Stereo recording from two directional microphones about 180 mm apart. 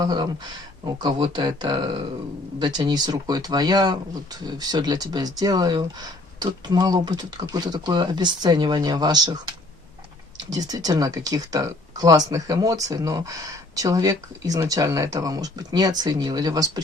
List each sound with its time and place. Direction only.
0.0 s speech: 25° right (ahead or behind)
10.5 s speech: 20° right (ahead or behind)